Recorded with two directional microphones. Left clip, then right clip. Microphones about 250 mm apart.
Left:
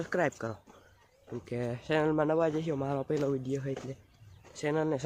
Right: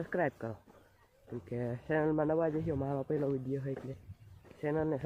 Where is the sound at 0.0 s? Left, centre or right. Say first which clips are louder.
Left 3 dB; centre.